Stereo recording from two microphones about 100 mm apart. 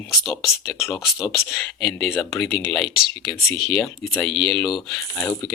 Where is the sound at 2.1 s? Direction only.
20° left (ahead or behind).